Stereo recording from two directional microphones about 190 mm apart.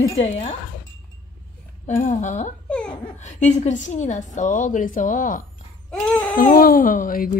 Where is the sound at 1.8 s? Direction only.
35° left (ahead or behind).